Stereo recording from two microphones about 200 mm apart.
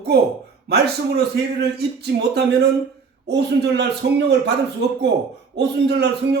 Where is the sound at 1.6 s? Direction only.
55° right (ahead or behind).